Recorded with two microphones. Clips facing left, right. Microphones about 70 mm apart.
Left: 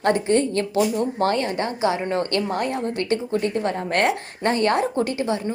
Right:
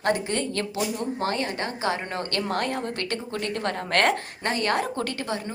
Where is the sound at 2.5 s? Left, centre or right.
Centre.